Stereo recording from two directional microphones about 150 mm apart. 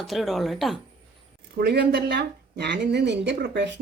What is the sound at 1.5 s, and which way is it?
Speech, 90° right.